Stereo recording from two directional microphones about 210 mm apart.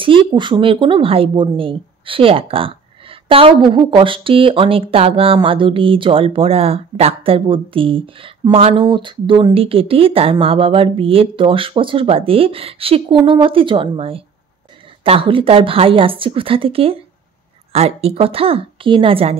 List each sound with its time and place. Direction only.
0.0 s a woman's voice: 25° right (ahead or behind)